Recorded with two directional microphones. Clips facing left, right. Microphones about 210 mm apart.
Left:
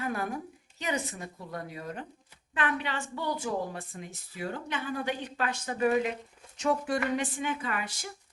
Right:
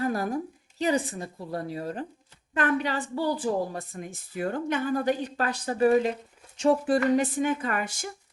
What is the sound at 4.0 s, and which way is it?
A woman's voice, 50° right (ahead or behind).